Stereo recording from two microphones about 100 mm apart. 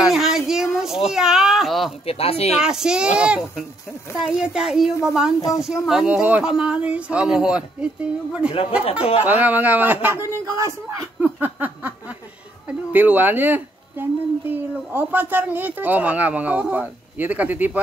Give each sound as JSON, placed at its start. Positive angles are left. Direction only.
{"t": 0.0, "sound": "a sound", "side_deg": -5}
{"t": 1.1, "sound": "speech", "side_deg": -5}
{"t": 2.0, "sound": "speech", "side_deg": 80}
{"t": 2.5, "sound": "speech", "side_deg": -5}
{"t": 11.3, "sound": "a sound", "side_deg": -20}
{"t": 12.6, "sound": "speech", "side_deg": -15}